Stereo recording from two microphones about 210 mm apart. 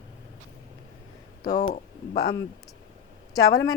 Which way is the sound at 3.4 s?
15° left (ahead or behind).